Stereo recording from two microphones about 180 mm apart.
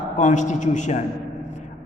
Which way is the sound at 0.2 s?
45° left (ahead or behind).